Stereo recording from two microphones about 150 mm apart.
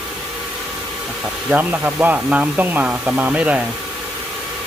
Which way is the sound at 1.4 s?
10° right (ahead or behind).